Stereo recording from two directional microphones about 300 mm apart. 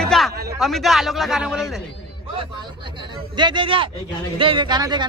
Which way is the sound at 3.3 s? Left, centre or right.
Centre.